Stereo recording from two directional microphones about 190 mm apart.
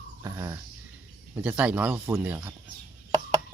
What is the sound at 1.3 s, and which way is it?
Speech, 10° right (ahead or behind).